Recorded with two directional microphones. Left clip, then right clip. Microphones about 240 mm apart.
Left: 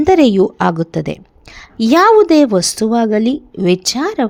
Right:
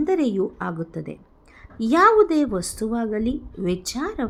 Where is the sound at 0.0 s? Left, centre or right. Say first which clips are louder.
Left 12 dB; left.